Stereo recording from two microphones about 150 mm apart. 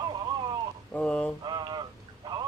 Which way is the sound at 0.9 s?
5° left (ahead or behind).